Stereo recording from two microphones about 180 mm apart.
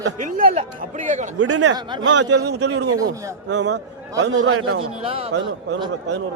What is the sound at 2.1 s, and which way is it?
A man's voice, 70° right (ahead or behind).